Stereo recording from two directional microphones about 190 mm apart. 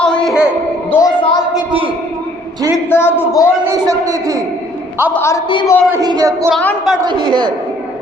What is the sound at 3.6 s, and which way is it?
Speech, 20° right (ahead or behind).